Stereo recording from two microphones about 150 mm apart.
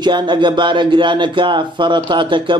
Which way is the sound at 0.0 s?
30° right (ahead or behind).